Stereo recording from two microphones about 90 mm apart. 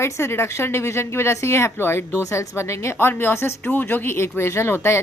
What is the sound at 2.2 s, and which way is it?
A woman's voice, 35° left (ahead or behind).